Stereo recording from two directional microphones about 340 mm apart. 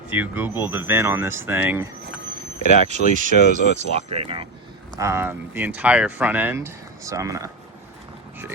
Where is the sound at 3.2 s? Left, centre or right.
Right.